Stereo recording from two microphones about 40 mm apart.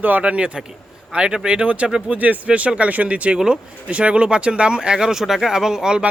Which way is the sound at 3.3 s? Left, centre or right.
Centre.